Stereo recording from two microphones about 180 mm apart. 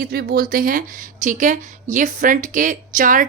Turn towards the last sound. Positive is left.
turn(degrees=-45)  # may be behind; listen again after turning